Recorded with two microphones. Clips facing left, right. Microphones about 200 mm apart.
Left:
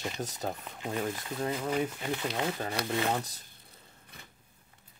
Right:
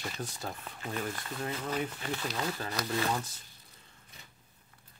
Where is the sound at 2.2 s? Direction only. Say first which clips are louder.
Left 3 dB; 25° left (ahead or behind).